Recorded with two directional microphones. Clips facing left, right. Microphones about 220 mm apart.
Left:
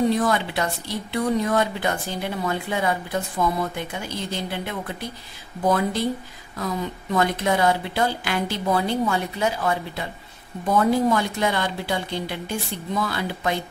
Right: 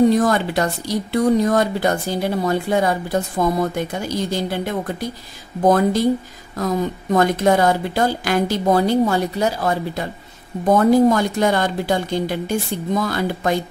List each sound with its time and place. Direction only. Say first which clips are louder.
0.1 s a woman's voice: right 5 dB; 45° right (ahead or behind)